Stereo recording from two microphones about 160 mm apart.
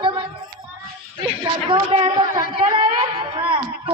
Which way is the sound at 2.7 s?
30° right (ahead or behind).